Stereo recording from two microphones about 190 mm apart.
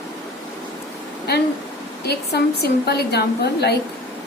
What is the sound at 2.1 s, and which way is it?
A woman's voice, 60° left (ahead or behind).